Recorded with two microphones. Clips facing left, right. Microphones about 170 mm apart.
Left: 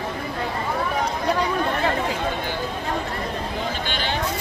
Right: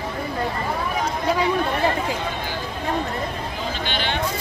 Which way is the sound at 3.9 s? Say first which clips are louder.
Right 1 dB; 40° left (ahead or behind).